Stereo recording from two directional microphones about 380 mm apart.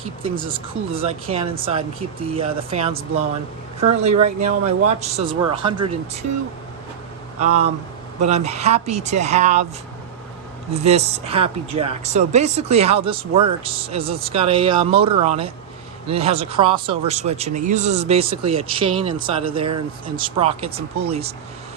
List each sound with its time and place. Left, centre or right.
0.2 s speech: centre
7.3 s speech: centre
10.8 s speech: centre